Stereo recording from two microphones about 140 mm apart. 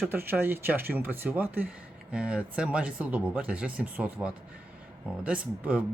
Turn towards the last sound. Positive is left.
turn(degrees=-10)  # may be behind; listen again after turning